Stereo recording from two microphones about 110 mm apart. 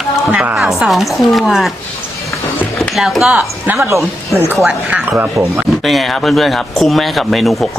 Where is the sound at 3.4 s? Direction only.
15° right (ahead or behind).